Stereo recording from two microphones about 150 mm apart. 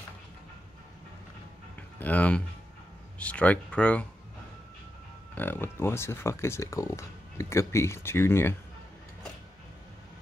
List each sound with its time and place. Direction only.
2.0 s speech: 10° left (ahead or behind)
5.3 s speech: 15° left (ahead or behind)